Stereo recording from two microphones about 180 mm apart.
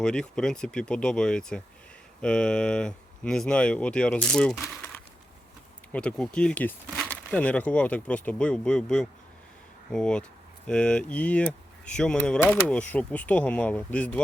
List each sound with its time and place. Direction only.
0.0 s speech: 5° left (ahead or behind)
5.9 s speech: 5° left (ahead or behind)